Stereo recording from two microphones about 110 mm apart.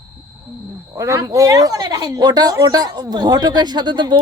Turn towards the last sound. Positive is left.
turn(degrees=-45)  # may be behind; listen again after turning